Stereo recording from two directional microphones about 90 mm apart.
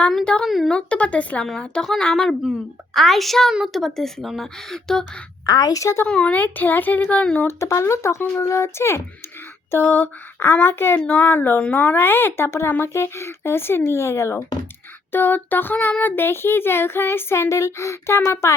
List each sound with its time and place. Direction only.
0.4 s a woman's voice: centre (ahead or behind)
0.7 s a woman's voice: 10° left (ahead or behind)
5.5 s speech: 45° left (ahead or behind)
6.1 s speech: 10° left (ahead or behind)
6.3 s a woman's voice: 20° left (ahead or behind)
7.4 s a woman's voice: 35° left (ahead or behind)